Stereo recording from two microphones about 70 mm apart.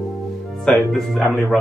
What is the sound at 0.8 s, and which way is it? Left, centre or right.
Speech, centre.